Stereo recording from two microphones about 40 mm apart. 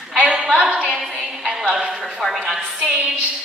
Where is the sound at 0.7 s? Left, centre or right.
Centre.